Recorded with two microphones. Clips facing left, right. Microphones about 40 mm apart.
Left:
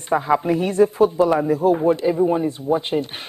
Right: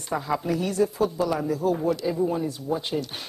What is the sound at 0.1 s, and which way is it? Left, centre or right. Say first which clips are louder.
A woman's voice: left 8 dB; left.